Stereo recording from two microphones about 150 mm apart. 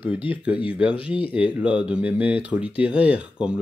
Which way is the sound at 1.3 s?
5° right (ahead or behind).